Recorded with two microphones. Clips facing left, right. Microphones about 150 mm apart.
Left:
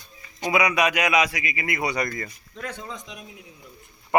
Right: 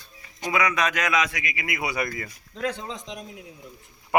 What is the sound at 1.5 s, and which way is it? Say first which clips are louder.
Speech: left 3 dB; centre (ahead or behind).